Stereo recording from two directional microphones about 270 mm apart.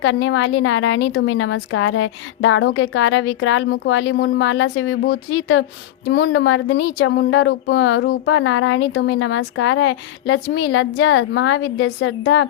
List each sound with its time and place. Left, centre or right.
0.0 s speech: left
6.1 s speech: left